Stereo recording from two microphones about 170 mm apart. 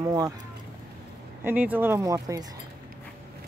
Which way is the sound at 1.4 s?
10° right (ahead or behind).